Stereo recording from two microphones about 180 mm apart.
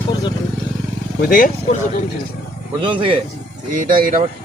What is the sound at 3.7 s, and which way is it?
Speech, 50° right (ahead or behind).